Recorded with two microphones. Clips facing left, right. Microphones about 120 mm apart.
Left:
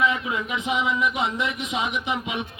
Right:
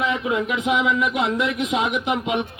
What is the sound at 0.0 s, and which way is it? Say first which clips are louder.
A man's voice: right 2 dB; 65° right (ahead or behind).